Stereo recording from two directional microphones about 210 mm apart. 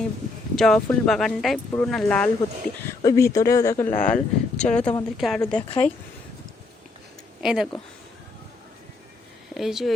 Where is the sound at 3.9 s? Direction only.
40° left (ahead or behind).